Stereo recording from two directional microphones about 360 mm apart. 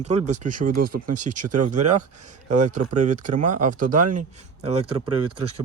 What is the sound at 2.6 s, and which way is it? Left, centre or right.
Speech, centre.